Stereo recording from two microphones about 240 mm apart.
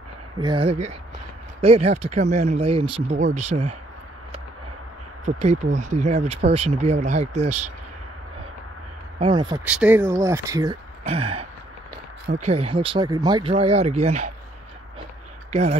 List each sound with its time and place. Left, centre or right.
0.4 s speech: right
5.2 s speech: right
9.2 s speech: centre
9.7 s speech: centre; by 14.2 s right